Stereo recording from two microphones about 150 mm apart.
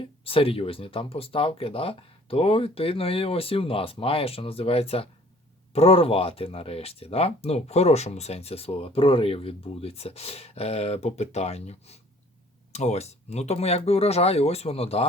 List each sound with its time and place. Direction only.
0.0 s speech: 40° left (ahead or behind)